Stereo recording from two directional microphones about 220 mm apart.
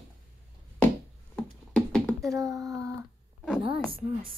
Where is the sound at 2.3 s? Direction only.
15° right (ahead or behind).